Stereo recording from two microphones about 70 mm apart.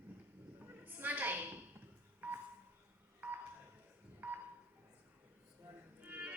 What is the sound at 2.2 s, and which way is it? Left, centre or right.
Telephone dialing, right.